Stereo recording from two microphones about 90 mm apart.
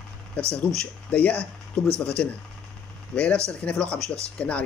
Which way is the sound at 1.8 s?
30° right (ahead or behind).